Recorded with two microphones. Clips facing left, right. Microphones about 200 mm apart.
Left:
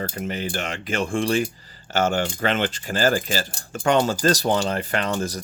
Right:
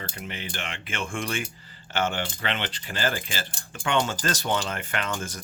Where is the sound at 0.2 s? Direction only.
45° left (ahead or behind).